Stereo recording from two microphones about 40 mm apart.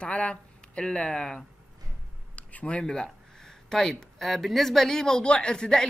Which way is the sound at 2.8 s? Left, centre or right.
Centre.